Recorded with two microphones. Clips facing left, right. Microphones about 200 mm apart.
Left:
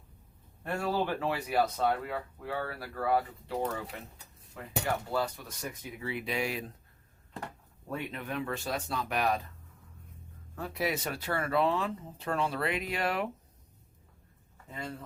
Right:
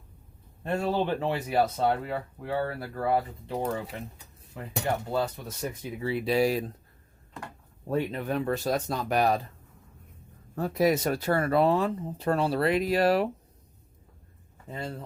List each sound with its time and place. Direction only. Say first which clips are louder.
0.6 s speech: right 4 dB; 25° right (ahead or behind)
7.9 s speech: right 8 dB; 35° right (ahead or behind)
10.5 s speech: right 9 dB; 40° right (ahead or behind)
14.7 s speech: right 4 dB; 30° right (ahead or behind)